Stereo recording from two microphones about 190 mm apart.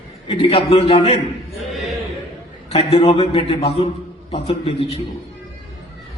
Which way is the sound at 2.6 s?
30° left (ahead or behind).